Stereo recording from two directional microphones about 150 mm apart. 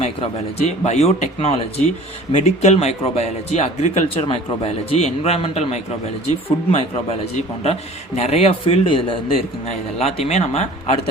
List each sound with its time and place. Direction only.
0.0 s a man's voice: 45° left (ahead or behind)